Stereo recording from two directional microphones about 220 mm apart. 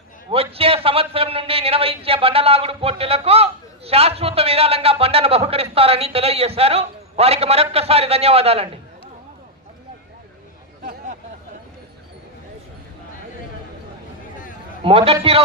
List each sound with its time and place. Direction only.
0.3 s a man's voice: 25° right (ahead or behind)
14.8 s a man's voice: 25° right (ahead or behind)